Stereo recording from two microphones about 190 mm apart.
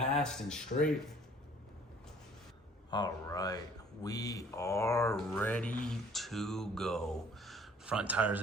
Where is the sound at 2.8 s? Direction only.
20° left (ahead or behind).